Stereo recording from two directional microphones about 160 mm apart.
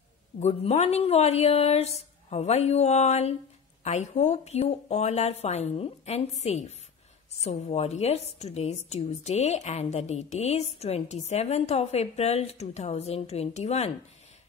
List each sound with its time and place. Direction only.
0.4 s a woman's voice: 40° left (ahead or behind)